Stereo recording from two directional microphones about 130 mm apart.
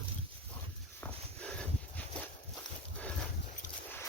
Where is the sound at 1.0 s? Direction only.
10° left (ahead or behind).